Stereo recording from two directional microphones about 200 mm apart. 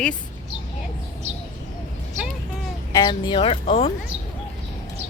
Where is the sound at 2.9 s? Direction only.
20° left (ahead or behind).